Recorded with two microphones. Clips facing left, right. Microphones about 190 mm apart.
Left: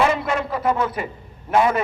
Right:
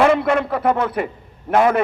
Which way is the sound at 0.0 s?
60° right (ahead or behind).